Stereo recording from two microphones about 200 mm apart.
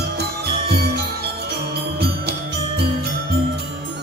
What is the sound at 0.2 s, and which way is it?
Music, 55° right (ahead or behind).